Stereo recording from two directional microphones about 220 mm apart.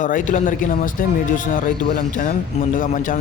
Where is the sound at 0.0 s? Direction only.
35° left (ahead or behind).